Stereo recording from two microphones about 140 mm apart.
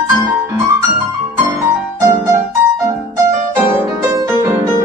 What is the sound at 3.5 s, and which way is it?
Music, 20° right (ahead or behind).